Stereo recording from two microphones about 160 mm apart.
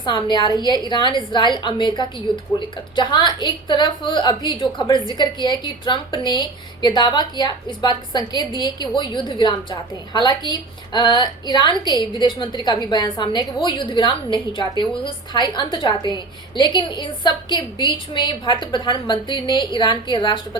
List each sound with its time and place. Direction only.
0.0 s a woman's voice: 30° left (ahead or behind)